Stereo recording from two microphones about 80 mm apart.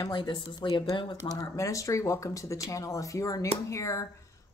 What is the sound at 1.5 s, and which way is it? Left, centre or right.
Speech, left.